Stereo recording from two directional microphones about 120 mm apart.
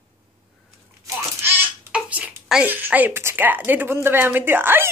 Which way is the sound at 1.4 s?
15° right (ahead or behind).